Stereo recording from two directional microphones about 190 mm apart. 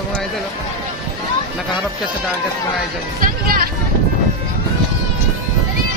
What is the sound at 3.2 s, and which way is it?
Music, 50° right (ahead or behind).